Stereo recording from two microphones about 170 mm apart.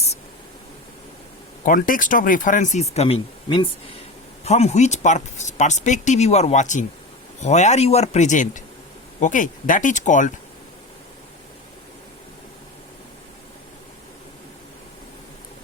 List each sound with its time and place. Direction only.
1.6 s speech: 50° left (ahead or behind)